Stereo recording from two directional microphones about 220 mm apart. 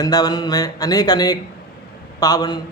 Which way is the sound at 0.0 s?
15° left (ahead or behind).